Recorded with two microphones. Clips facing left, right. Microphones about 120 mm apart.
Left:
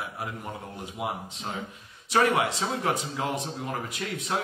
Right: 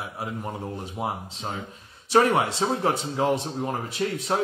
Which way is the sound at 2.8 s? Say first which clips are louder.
Right 4 dB; 30° right (ahead or behind).